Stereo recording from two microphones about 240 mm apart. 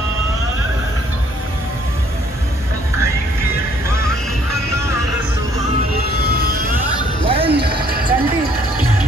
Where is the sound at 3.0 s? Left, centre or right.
Centre.